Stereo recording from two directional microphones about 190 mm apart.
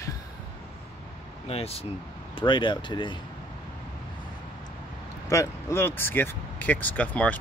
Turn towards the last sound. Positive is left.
turn(degrees=10)  # may be behind; listen again after turning